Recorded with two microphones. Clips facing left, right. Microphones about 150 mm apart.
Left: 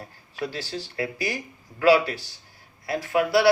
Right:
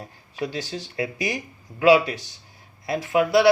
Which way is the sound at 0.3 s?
20° right (ahead or behind).